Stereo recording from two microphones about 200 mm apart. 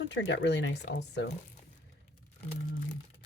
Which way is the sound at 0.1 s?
60° left (ahead or behind).